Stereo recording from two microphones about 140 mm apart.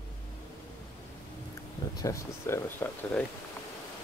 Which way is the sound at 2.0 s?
20° left (ahead or behind).